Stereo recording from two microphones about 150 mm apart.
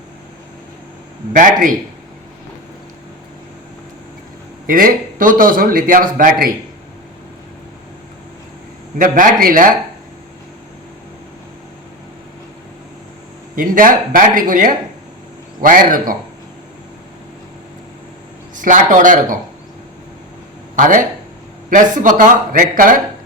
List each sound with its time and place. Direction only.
1.3 s speech: 65° right (ahead or behind)
4.6 s a man's voice: 70° right (ahead or behind)
9.0 s speech: 65° right (ahead or behind)
13.6 s a man's voice: 65° right (ahead or behind)
18.5 s speech: 60° right (ahead or behind)
20.7 s speech: 60° right (ahead or behind)